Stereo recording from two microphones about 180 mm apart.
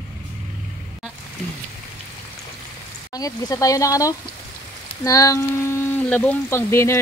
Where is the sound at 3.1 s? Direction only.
20° left (ahead or behind).